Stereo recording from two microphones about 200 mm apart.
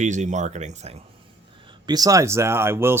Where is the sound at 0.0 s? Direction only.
35° right (ahead or behind).